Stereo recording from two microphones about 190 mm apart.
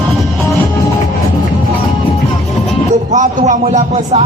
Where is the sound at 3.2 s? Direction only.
40° right (ahead or behind).